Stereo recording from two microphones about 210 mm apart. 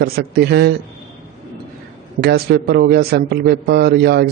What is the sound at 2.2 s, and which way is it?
A man's voice, 50° right (ahead or behind).